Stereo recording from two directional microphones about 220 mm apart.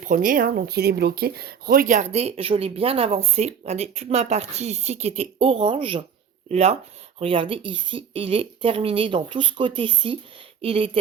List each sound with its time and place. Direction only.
0.0 s speech: 35° right (ahead or behind)